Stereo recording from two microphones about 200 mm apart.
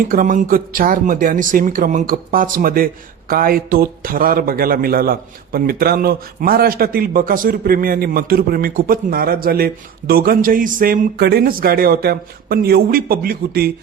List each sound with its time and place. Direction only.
0.1 s speech: 40° right (ahead or behind)